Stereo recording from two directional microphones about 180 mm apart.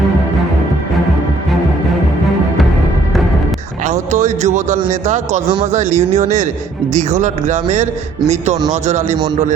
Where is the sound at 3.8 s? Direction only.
40° right (ahead or behind).